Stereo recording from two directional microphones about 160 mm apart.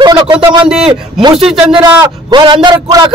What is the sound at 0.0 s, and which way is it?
Speech, 30° right (ahead or behind).